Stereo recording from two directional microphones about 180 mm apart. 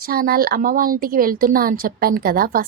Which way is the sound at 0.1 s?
55° right (ahead or behind).